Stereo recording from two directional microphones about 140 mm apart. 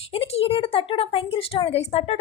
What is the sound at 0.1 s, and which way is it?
A woman's voice, 40° left (ahead or behind).